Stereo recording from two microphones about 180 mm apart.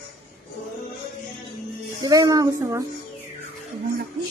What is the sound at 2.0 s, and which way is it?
Speech, 20° right (ahead or behind).